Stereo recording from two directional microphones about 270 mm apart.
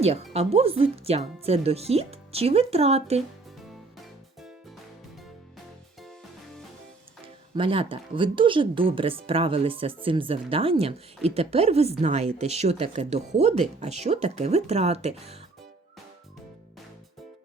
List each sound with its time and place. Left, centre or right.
0.3 s speech: right
3.9 s music: centre
7.5 s speech: centre